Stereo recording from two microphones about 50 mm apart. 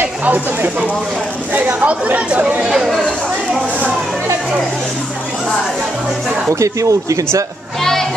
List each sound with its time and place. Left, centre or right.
0.2 s speech: right
2.7 s speech: centre
6.5 s speech: right
7.8 s a sound: centre